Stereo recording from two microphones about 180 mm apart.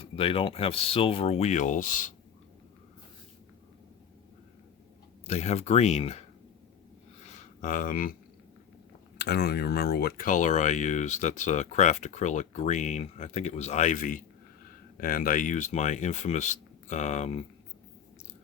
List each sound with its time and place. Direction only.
0.0 s speech: 30° left (ahead or behind); by 2.1 s 45° left (ahead or behind)
5.2 s speech: 35° left (ahead or behind)
7.3 s a sound: 50° left (ahead or behind)
9.1 s speech: 65° left (ahead or behind); by 17.4 s 40° left (ahead or behind)